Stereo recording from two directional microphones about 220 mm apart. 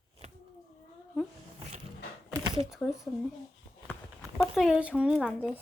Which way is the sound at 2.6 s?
Centre (ahead or behind).